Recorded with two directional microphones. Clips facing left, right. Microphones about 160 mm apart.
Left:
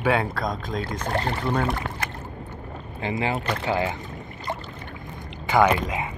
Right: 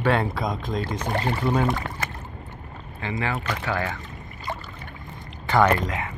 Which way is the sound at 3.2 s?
20° left (ahead or behind).